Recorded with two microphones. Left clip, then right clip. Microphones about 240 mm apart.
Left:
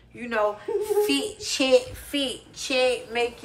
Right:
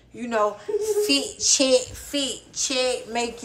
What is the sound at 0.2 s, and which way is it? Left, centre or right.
A woman's voice, centre.